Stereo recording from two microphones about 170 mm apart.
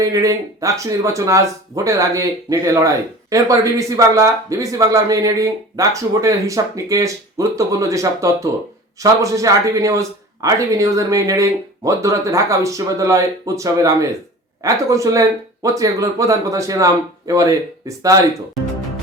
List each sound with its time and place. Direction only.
0.0 s speech: 20° right (ahead or behind)